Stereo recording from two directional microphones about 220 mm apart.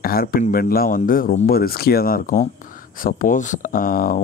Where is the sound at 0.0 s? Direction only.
40° left (ahead or behind).